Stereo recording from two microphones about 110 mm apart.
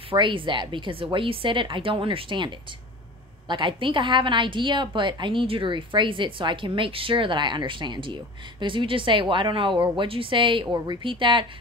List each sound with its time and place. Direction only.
0.1 s a woman's voice: 50° right (ahead or behind)